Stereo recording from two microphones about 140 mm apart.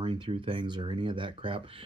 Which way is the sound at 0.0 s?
40° right (ahead or behind).